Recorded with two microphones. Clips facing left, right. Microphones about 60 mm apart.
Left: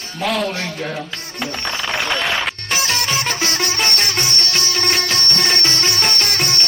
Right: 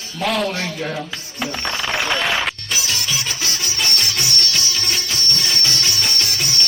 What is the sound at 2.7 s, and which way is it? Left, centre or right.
Music, left.